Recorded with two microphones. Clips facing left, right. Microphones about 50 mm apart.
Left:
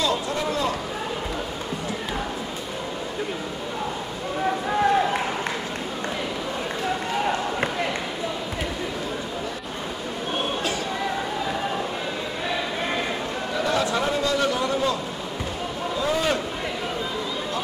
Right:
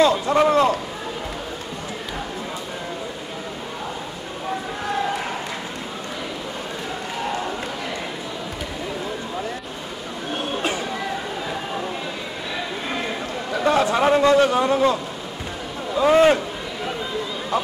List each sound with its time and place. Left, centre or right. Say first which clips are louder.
0.0 s vehicle: right 8 dB; right
13.7 s a sound: right 7 dB; right
16.0 s a man's voice: right 10 dB; right